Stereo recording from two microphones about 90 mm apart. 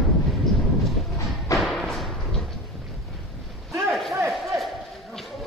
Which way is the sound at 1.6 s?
Centre (ahead or behind).